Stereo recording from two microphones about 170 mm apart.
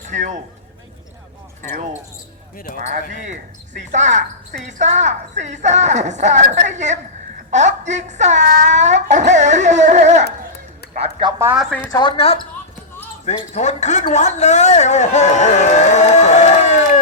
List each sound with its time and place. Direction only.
0.1 s speech: 45° right (ahead or behind)
1.7 s speech: 50° right (ahead or behind)
2.6 s speech: 55° left (ahead or behind)
3.8 s speech: 45° right (ahead or behind)
11.0 s speech: 25° right (ahead or behind)
11.9 s a man's voice: 25° left (ahead or behind); by 17.0 s 45° left (ahead or behind)